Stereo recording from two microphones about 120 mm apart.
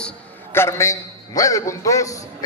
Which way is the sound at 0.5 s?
25° left (ahead or behind).